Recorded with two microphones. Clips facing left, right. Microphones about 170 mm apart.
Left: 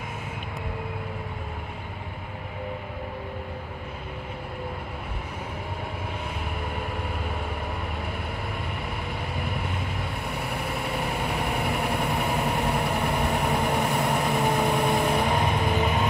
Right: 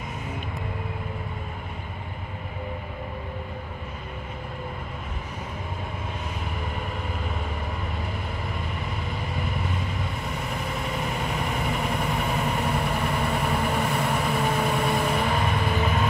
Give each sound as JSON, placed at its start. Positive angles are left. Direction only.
{"t": 10.7, "sound": "vehicle", "side_deg": 10}